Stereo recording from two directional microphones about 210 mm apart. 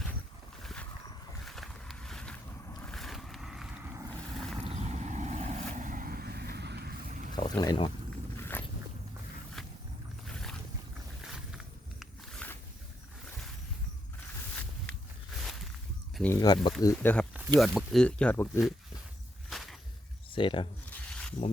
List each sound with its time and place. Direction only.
0.6 s a sound: centre (ahead or behind)
2.8 s vehicle: centre (ahead or behind)
4.2 s boat: centre (ahead or behind)
4.6 s vehicle: 30° right (ahead or behind)
7.3 s boat: 20° left (ahead or behind)
8.4 s zipper: 10° left (ahead or behind)
10.3 s boat: 5° left (ahead or behind)
11.2 s wild animals: centre (ahead or behind)
15.4 s a sound: centre (ahead or behind)
16.1 s speech: 5° left (ahead or behind)
19.5 s a sound: centre (ahead or behind)
20.3 s speech: 25° left (ahead or behind)
21.4 s a sound: 35° left (ahead or behind)